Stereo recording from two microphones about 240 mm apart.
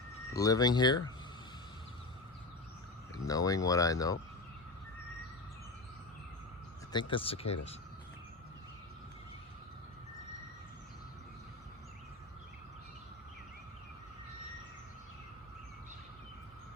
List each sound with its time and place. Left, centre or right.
0.3 s speech: centre
3.2 s speech: centre
7.1 s speech: left